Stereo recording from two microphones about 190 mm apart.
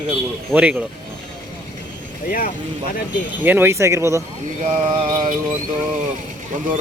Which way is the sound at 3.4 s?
10° right (ahead or behind).